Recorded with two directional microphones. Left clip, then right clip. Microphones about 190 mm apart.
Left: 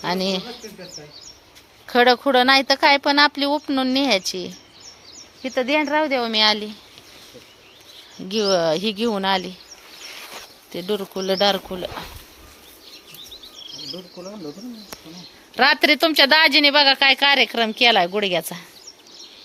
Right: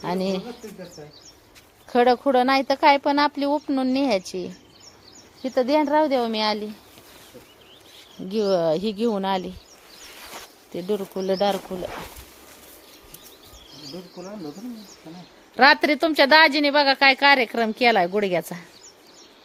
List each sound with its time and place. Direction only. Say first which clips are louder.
0.0 s a woman's voice: left 3 dB; 5° right (ahead or behind)
1.9 s a woman's voice: left 3 dB; centre (ahead or behind)
5.4 s speech: even; 15° right (ahead or behind)
8.3 s a woman's voice: left 2 dB; centre (ahead or behind)
10.0 s a sound: left 3 dB; 15° left (ahead or behind)
10.8 s a woman's voice: left 1 dB; centre (ahead or behind)
15.5 s a woman's voice: even; centre (ahead or behind)